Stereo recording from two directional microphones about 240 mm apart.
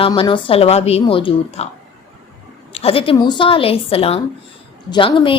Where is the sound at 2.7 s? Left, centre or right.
Left.